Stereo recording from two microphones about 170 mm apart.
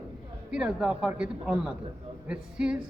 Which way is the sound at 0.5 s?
5° right (ahead or behind).